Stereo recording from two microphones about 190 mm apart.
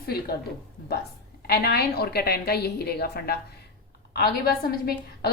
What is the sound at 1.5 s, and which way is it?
A woman's voice, 55° left (ahead or behind).